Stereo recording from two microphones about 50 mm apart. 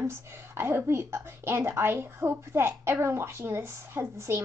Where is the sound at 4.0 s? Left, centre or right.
Right.